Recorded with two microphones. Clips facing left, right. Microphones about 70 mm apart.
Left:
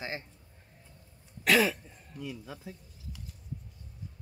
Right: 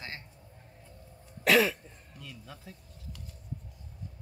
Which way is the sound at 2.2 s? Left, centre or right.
Centre.